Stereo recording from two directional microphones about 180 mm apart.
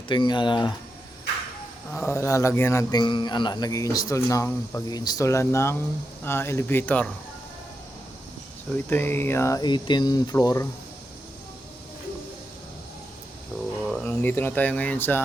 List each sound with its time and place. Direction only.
0.1 s speech: 25° left (ahead or behind)
1.9 s speech: 15° left (ahead or behind)
8.9 s speech: 15° left (ahead or behind)
13.9 s speech: 10° left (ahead or behind)